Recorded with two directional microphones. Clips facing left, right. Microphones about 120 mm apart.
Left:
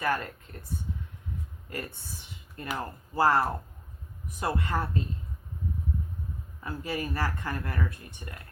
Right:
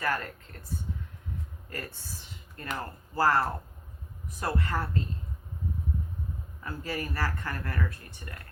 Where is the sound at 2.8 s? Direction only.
20° left (ahead or behind).